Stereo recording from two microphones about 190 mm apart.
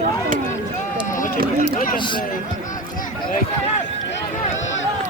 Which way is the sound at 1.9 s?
25° left (ahead or behind).